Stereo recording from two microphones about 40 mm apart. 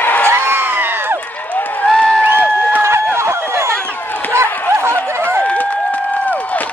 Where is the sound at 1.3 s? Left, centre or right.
Left.